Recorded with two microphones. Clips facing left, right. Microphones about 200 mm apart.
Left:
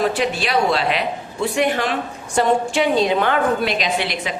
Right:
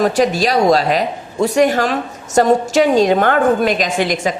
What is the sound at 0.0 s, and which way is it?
A man's voice, 40° right (ahead or behind).